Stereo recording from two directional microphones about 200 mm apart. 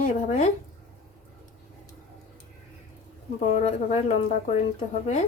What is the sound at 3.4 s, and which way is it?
Speech, 35° left (ahead or behind).